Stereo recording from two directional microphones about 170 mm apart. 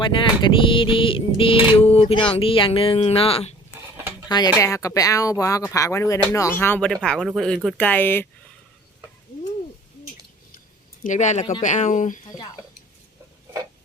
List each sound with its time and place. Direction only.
0.0 s a sound: 30° left (ahead or behind)
4.3 s speech: 25° left (ahead or behind)
11.0 s speech: 45° left (ahead or behind)